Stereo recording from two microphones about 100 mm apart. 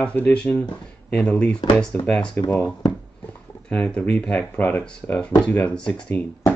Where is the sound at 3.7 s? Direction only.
15° left (ahead or behind).